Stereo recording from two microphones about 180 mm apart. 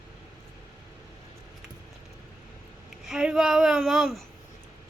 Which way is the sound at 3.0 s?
5° right (ahead or behind).